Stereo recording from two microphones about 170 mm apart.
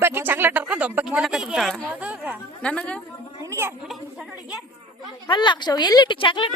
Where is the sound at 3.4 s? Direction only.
15° right (ahead or behind).